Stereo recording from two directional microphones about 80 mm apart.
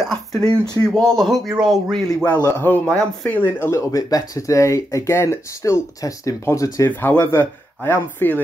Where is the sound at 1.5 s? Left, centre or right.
Centre.